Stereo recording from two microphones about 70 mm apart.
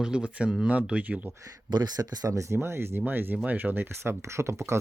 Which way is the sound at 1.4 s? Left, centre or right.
Right.